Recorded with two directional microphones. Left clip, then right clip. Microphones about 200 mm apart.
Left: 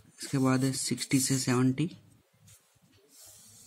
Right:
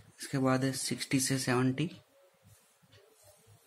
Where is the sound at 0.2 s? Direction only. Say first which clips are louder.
Left 2 dB; 30° left (ahead or behind).